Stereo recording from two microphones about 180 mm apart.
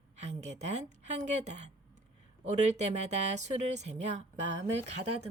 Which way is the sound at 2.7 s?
40° right (ahead or behind).